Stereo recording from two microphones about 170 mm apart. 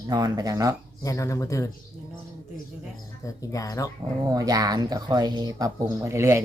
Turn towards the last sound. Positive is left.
turn(degrees=-15)  # may be behind; listen again after turning